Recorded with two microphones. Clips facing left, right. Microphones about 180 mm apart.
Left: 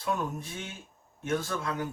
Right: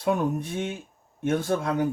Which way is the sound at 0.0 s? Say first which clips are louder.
Right 7 dB; 60° right (ahead or behind).